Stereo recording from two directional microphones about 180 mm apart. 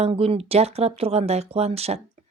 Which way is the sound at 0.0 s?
35° right (ahead or behind).